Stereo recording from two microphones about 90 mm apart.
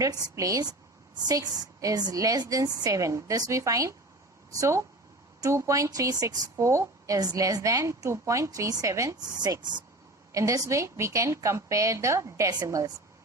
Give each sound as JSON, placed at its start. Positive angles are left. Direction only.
{"t": 0.0, "sound": "a woman's voice", "side_deg": -40}